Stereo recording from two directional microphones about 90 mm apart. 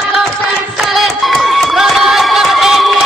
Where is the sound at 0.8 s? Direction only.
Centre (ahead or behind).